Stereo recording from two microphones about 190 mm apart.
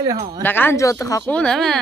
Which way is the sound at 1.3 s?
5° left (ahead or behind).